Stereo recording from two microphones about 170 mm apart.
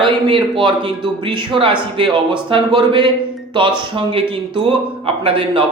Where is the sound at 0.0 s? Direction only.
30° right (ahead or behind).